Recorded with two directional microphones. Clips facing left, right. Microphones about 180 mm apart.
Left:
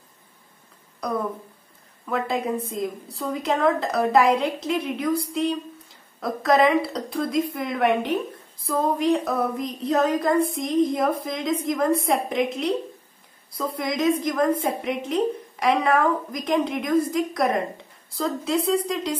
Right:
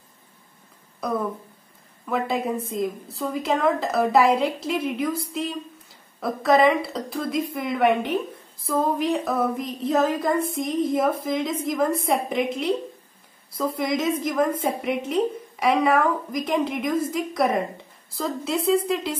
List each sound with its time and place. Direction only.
1.0 s a woman's voice: 5° right (ahead or behind)